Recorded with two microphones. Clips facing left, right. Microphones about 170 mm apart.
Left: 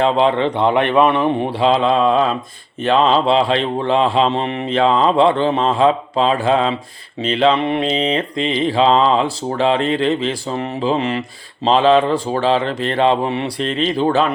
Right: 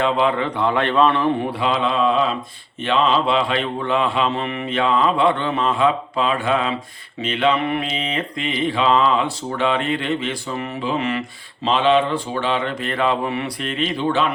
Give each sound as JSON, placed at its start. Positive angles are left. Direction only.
{"t": 0.0, "sound": "a man's voice", "side_deg": 30}
{"t": 1.5, "sound": "mantra", "side_deg": 30}